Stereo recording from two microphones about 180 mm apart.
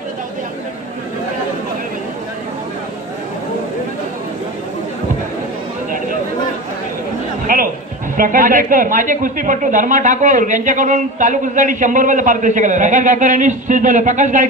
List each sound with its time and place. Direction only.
7.5 s music: 50° right (ahead or behind)
8.2 s a woman's voice: 50° right (ahead or behind)